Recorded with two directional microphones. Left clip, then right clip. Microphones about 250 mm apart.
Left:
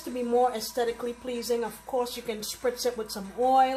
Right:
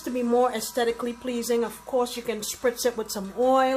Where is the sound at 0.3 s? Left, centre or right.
Right.